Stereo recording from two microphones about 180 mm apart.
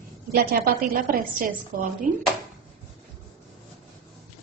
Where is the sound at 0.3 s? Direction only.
60° right (ahead or behind).